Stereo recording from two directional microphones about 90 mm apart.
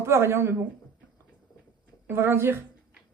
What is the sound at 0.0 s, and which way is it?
Speech, 30° right (ahead or behind).